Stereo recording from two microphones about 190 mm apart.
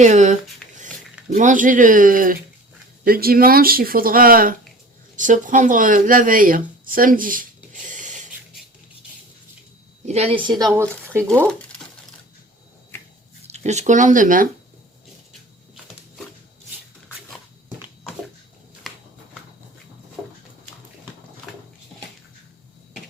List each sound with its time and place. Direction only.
0.0 s speech: 40° right (ahead or behind)
0.6 s a sound: 5° left (ahead or behind)
1.3 s speech: 40° right (ahead or behind)
10.1 s speech: 35° right (ahead or behind)
10.7 s speech: 15° right (ahead or behind)
13.5 s speech: 35° right (ahead or behind)